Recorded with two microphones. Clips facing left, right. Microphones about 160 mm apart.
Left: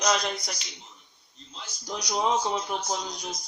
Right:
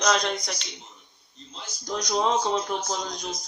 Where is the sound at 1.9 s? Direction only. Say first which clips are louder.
Right 2 dB; 10° left (ahead or behind).